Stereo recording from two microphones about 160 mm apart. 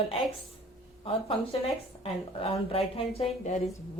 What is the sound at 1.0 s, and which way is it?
A woman's voice, 35° left (ahead or behind).